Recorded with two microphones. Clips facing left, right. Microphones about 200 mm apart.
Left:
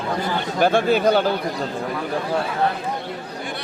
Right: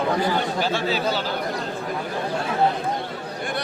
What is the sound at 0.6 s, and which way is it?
Speech, 55° left (ahead or behind).